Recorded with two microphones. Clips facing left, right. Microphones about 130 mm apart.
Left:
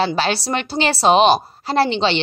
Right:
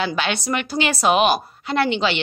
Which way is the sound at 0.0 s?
35° left (ahead or behind).